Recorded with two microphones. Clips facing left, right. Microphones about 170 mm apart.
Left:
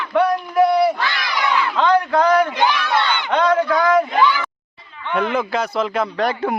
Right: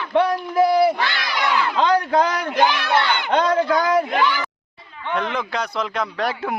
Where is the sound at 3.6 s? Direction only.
35° right (ahead or behind).